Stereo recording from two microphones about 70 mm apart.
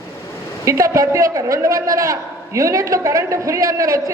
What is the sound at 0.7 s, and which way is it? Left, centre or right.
A man's voice, right.